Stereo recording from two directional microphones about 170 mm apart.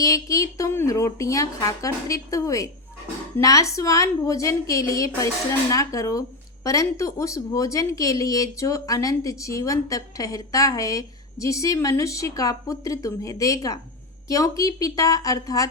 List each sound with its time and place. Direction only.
0.0 s speech: 20° left (ahead or behind)